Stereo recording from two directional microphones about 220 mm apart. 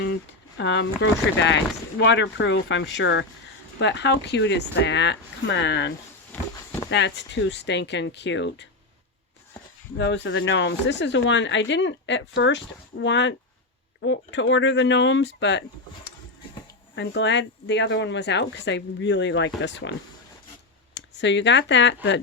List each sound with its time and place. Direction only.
0.0 s a sound: 50° left (ahead or behind)
1.4 s speech: 55° left (ahead or behind)
6.9 s speech: 55° left (ahead or behind)
10.0 s speech: 55° left (ahead or behind)
16.9 s speech: 55° left (ahead or behind)